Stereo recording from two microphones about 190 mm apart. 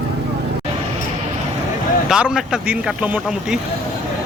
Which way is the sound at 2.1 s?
5° right (ahead or behind).